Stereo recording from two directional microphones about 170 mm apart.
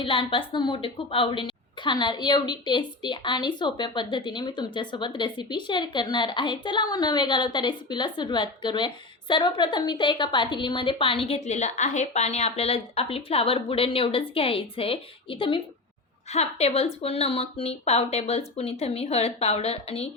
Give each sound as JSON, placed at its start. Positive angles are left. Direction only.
{"t": 0.0, "sound": "a woman's voice", "side_deg": 30}